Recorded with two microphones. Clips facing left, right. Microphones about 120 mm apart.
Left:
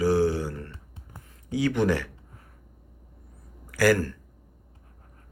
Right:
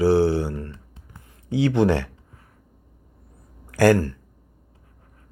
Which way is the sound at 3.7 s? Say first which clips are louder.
Right 5 dB; 30° right (ahead or behind).